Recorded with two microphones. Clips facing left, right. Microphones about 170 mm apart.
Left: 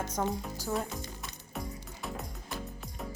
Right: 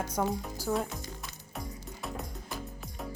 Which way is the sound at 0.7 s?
Centre (ahead or behind).